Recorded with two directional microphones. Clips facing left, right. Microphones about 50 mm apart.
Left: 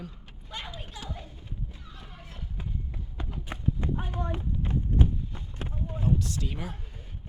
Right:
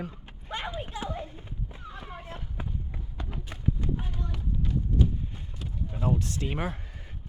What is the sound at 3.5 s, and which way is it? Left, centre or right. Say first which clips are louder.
Run: left 4 dB; left.